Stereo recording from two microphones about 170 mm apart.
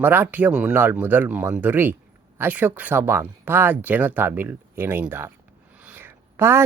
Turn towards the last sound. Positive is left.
turn(degrees=-15)  # may be behind; listen again after turning